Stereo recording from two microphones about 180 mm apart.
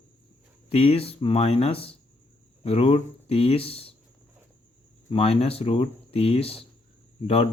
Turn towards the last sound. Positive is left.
turn(degrees=35)  # may be behind; listen again after turning